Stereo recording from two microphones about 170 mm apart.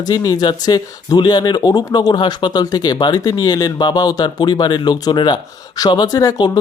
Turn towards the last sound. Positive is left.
turn(degrees=25)  # may be behind; listen again after turning